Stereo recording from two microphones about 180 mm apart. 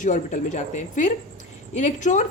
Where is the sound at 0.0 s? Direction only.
45° left (ahead or behind).